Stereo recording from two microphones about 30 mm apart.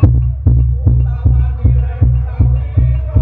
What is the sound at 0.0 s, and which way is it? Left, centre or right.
Music, centre.